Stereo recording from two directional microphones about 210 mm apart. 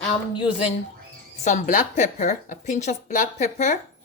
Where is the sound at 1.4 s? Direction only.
35° left (ahead or behind).